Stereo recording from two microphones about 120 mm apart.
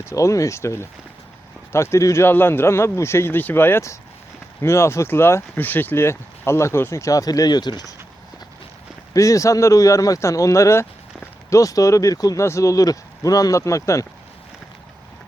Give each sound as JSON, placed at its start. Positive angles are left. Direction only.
{"t": 0.0, "sound": "speech", "side_deg": 25}
{"t": 9.1, "sound": "speech", "side_deg": 25}